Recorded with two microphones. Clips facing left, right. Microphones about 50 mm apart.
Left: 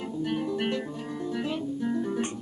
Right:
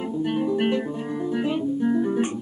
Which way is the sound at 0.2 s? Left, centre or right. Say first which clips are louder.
Right 6 dB; centre.